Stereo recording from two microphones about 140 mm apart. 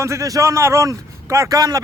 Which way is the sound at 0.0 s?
20° right (ahead or behind).